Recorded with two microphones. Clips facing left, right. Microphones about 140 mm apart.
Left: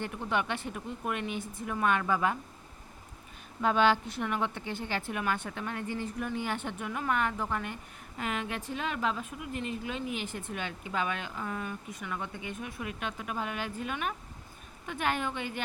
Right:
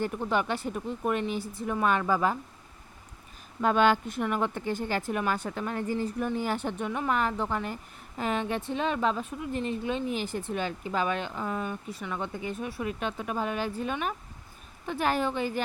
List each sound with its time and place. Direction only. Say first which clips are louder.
0.0 s a woman's voice: right 4 dB; 35° right (ahead or behind)
3.6 s a woman's voice: right 2 dB; 45° right (ahead or behind)